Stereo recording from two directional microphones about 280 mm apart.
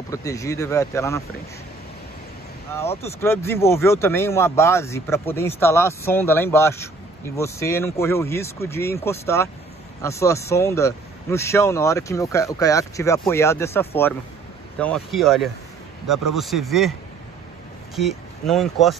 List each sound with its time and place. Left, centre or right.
0.1 s speech: centre
2.9 s speech: left
3.2 s speech: centre
17.9 s speech: centre